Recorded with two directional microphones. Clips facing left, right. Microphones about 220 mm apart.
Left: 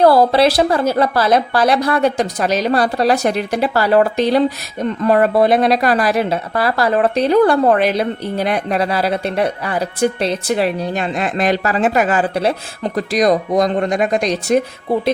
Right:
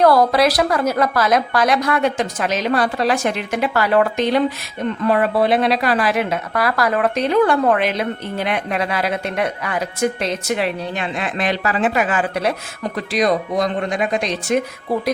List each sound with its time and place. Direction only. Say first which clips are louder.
0.0 s a woman's voice: left 3 dB; 30° left (ahead or behind)